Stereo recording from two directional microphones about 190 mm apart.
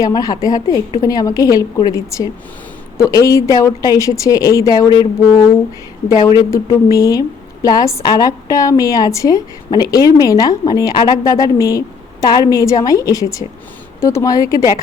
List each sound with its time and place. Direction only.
0.0 s a woman's voice: 20° left (ahead or behind)